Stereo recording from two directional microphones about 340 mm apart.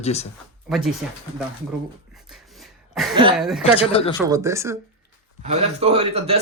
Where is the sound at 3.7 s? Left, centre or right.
Centre.